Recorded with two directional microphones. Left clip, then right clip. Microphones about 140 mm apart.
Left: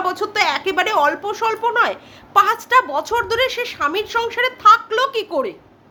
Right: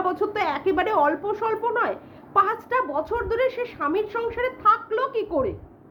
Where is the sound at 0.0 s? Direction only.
10° left (ahead or behind).